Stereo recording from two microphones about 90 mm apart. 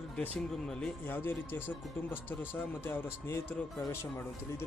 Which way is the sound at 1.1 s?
25° left (ahead or behind).